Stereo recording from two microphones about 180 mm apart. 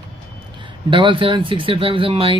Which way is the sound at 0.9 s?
30° right (ahead or behind).